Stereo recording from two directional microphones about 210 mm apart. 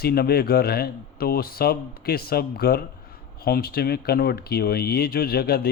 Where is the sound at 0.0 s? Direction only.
50° left (ahead or behind).